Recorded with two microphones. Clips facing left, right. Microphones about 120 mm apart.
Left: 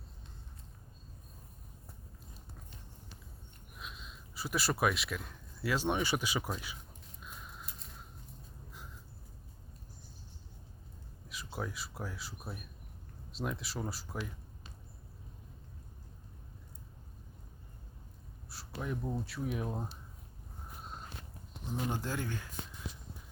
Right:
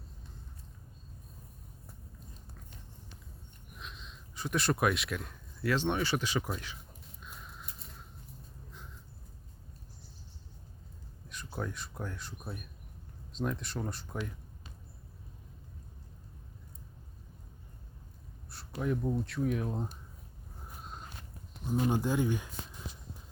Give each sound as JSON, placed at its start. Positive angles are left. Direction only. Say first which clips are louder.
{"t": 3.8, "sound": "speech", "louder": "even", "side_deg": 5}
{"t": 7.2, "sound": "a sound", "louder": "even", "side_deg": 0}
{"t": 11.5, "sound": "speech", "louder": "right 2 dB", "side_deg": 5}
{"t": 18.8, "sound": "speech", "louder": "right 5 dB", "side_deg": 0}
{"t": 20.8, "sound": "walk", "louder": "right 1 dB", "side_deg": 0}
{"t": 21.8, "sound": "speech", "louder": "right 7 dB", "side_deg": -15}